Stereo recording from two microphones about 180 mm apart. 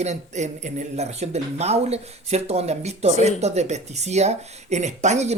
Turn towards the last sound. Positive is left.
turn(degrees=-40)  # may be behind; listen again after turning